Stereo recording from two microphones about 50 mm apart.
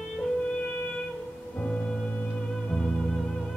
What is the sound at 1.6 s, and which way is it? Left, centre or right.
Music, left.